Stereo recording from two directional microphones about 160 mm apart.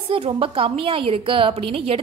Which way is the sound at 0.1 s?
35° right (ahead or behind).